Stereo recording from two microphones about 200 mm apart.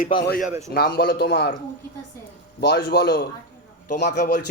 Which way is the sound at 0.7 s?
55° left (ahead or behind).